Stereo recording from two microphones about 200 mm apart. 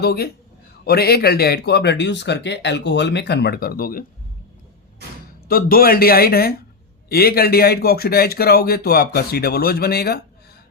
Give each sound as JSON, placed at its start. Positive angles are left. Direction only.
{"t": 0.0, "sound": "speech", "side_deg": 50}
{"t": 5.5, "sound": "speech", "side_deg": 45}